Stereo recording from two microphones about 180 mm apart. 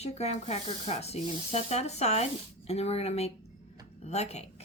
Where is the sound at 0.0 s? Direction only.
35° left (ahead or behind).